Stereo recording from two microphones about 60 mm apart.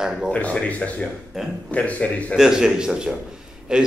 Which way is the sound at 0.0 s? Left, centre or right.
Centre.